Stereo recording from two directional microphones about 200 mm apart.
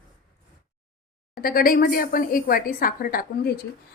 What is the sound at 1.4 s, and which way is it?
A woman's voice, 45° left (ahead or behind).